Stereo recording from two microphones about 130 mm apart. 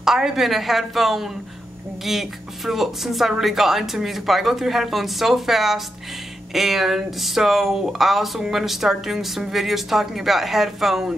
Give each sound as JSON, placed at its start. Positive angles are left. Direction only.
{"t": 0.0, "sound": "speech", "side_deg": -5}